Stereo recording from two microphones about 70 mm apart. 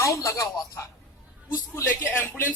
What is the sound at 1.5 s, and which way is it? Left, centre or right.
Speech, left.